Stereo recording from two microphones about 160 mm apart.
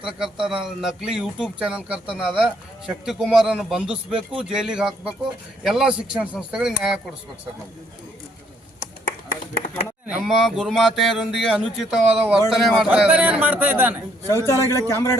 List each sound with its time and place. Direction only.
0.0 s speech: 5° right (ahead or behind)
9.6 s a sound: 50° left (ahead or behind)
10.2 s a man's voice: centre (ahead or behind)
14.3 s a man's voice: 15° left (ahead or behind)